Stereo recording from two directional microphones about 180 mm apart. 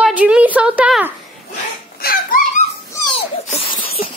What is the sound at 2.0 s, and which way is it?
Dog, 50° left (ahead or behind).